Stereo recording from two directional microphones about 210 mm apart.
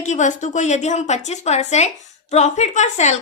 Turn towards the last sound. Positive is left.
turn(degrees=35)  # may be behind; listen again after turning